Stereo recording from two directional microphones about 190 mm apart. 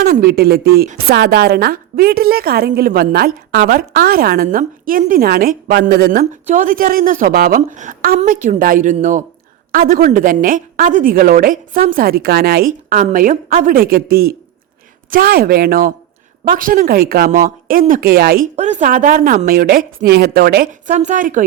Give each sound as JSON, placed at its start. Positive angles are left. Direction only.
{"t": 0.0, "sound": "a woman's voice", "side_deg": -55}
{"t": 18.5, "sound": "a woman's voice", "side_deg": -40}
{"t": 20.9, "sound": "a woman's voice", "side_deg": -40}